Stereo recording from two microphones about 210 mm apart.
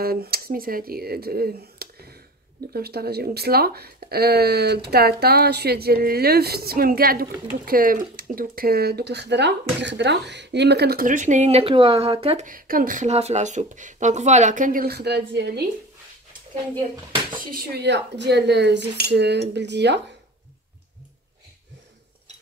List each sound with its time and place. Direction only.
0.0 s speech: 45° right (ahead or behind); by 12.4 s 25° right (ahead or behind)
12.4 s speech: 40° right (ahead or behind)
17.5 s speech: 50° right (ahead or behind)